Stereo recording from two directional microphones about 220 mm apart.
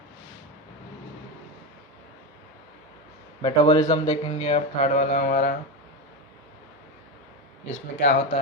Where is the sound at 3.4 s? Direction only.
20° left (ahead or behind); by 5.5 s 35° left (ahead or behind).